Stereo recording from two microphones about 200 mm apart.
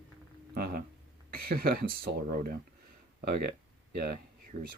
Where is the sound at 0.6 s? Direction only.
50° right (ahead or behind).